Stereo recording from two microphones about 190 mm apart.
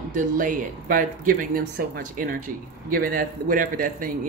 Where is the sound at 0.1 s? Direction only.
45° right (ahead or behind).